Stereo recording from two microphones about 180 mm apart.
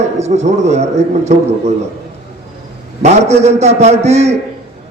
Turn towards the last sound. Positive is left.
turn(degrees=-35)  # may be behind; listen again after turning